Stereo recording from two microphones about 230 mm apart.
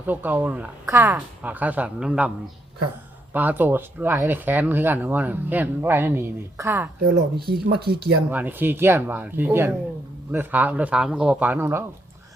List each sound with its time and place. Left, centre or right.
0.0 s speech: centre
3.3 s speech: centre
7.3 s speech: right
8.3 s speech: centre